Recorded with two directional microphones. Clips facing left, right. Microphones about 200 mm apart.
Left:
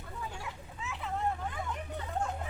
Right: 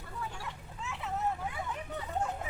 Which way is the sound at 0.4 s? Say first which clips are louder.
Even; centre (ahead or behind).